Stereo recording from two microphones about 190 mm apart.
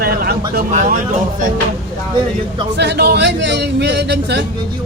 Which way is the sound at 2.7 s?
60° right (ahead or behind).